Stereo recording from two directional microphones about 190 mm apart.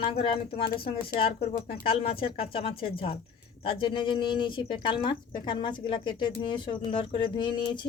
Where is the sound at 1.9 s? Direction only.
30° left (ahead or behind).